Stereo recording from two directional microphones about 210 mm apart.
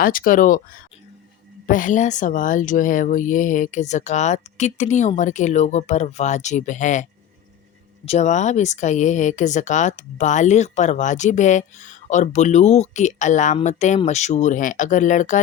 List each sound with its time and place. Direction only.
0.0 s speech: 40° left (ahead or behind)
1.6 s speech: 40° left (ahead or behind)